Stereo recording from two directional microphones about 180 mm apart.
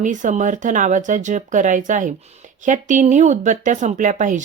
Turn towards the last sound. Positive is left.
turn(degrees=-45)  # may be behind; listen again after turning